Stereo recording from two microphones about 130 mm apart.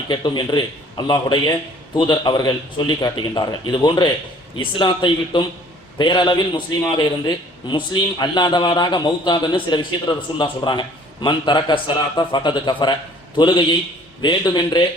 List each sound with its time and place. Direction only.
0.1 s a man's voice: 35° left (ahead or behind)